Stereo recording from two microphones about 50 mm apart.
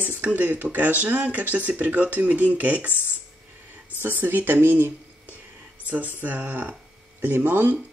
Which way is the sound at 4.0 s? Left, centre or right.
Right.